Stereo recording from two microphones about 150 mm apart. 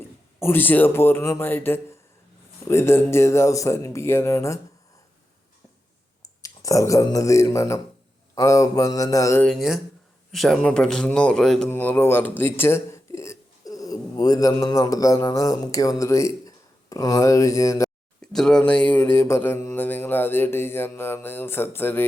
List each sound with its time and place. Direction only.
0.3 s speech: 15° left (ahead or behind)
6.2 s a man's voice: 20° left (ahead or behind)
9.5 s speech: centre (ahead or behind); by 17.8 s 20° left (ahead or behind)
18.2 s speech: 5° left (ahead or behind)